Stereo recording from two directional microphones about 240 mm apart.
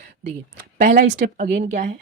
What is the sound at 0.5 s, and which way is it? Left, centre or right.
Speech, right.